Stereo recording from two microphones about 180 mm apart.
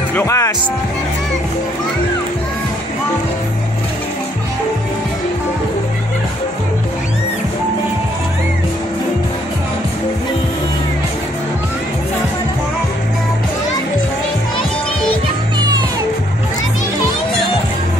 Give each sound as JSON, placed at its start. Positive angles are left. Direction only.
{"t": 0.1, "sound": "speech", "side_deg": 15}